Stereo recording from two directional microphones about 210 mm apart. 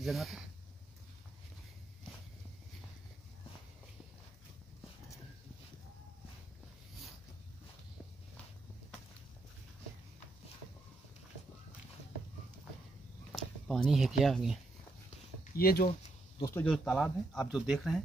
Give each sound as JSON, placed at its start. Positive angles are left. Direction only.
{"t": 0.0, "sound": "speech", "side_deg": 0}
{"t": 13.3, "sound": "speech", "side_deg": 0}
{"t": 15.5, "sound": "speech", "side_deg": 45}
{"t": 16.5, "sound": "speech", "side_deg": 5}